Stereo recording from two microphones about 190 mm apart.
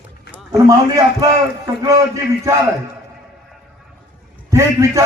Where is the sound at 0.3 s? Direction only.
20° right (ahead or behind).